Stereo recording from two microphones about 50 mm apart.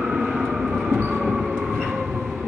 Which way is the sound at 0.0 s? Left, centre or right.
Centre.